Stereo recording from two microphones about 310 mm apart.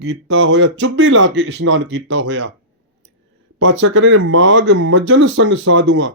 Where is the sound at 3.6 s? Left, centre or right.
Right.